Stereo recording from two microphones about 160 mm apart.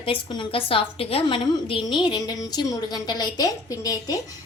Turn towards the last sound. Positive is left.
turn(degrees=20)  # may be behind; listen again after turning